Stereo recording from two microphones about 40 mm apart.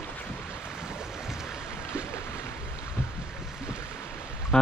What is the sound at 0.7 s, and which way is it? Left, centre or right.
Boat, centre.